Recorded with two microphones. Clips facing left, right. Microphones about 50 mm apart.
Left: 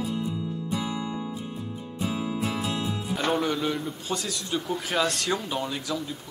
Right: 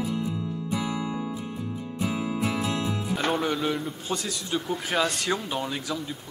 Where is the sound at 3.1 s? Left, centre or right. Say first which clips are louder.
Left 1 dB; centre.